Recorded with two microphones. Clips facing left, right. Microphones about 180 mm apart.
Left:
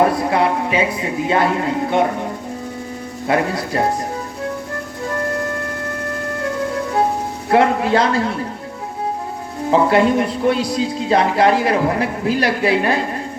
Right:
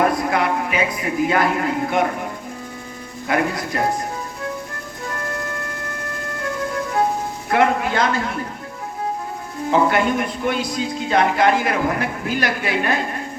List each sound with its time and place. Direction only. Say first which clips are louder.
0.0 s speech: left 3 dB; 30° left (ahead or behind)
3.2 s a man's voice: left 2 dB; 30° left (ahead or behind)
7.5 s a man's voice: left 4 dB; 30° left (ahead or behind)
9.6 s a man's voice: left 4 dB; 30° left (ahead or behind)